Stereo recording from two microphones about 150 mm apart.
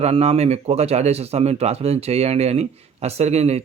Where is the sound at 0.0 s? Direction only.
45° right (ahead or behind).